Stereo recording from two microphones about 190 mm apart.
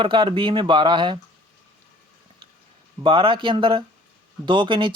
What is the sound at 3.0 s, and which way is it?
Speech, 25° right (ahead or behind).